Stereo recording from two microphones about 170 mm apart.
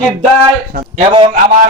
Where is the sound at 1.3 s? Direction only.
55° right (ahead or behind).